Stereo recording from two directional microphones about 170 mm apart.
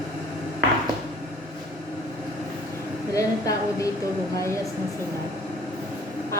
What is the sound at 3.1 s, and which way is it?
Speech, 20° left (ahead or behind).